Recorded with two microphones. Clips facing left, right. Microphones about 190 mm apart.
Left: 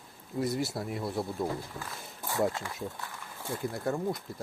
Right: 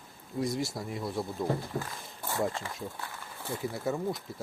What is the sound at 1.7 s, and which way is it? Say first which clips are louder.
Speech: right 7 dB; 50° right (ahead or behind).